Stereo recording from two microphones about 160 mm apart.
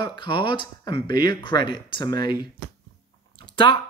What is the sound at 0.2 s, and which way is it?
Speech, 30° left (ahead or behind).